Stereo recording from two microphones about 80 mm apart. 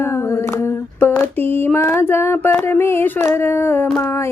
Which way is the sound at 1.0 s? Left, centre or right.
Left.